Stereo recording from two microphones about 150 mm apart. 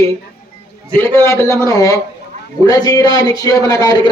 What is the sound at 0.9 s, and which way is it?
A man's voice, 15° left (ahead or behind).